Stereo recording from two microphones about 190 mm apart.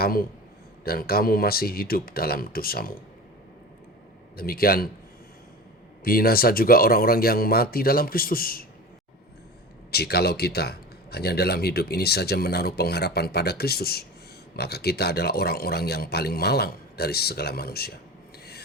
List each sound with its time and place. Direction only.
0.0 s a man's voice: 50° left (ahead or behind)
4.4 s speech: 50° left (ahead or behind)
6.1 s speech: 50° left (ahead or behind)
9.9 s a man's voice: 55° left (ahead or behind)